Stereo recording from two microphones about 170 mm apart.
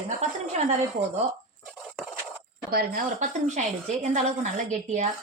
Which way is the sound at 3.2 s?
45° right (ahead or behind).